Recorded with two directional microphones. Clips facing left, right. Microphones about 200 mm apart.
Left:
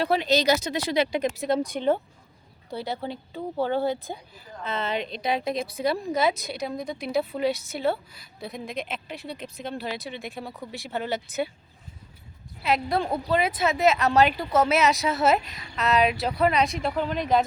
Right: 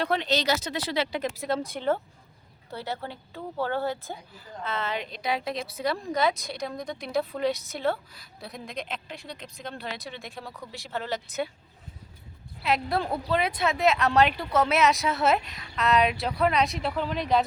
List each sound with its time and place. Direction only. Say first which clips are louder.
0.0 s speech: left 4 dB; 10° left (ahead or behind)
10.2 s speech: left 4 dB; 20° left (ahead or behind)
10.8 s speech: left 3 dB; 10° left (ahead or behind)
12.6 s speech: left 2 dB; centre (ahead or behind)